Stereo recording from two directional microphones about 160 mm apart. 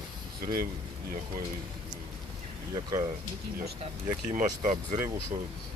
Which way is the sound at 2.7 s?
20° right (ahead or behind).